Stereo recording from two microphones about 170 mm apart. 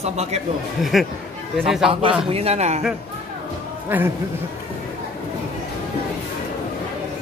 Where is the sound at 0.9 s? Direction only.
Centre (ahead or behind).